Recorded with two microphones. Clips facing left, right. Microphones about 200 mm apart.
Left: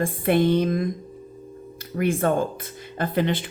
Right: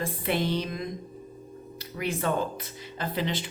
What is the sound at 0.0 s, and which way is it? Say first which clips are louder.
Speech: left 8 dB; 50° left (ahead or behind).